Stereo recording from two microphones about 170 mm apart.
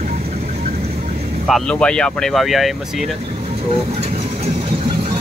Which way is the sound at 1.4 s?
5° left (ahead or behind).